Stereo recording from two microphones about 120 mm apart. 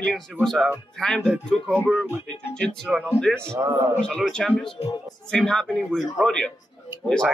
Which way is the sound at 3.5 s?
25° right (ahead or behind).